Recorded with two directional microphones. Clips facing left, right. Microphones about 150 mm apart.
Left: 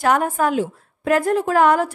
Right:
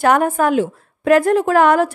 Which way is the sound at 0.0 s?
65° right (ahead or behind).